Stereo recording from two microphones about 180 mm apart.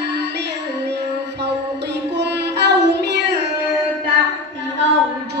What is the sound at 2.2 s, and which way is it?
Child singing, 70° right (ahead or behind).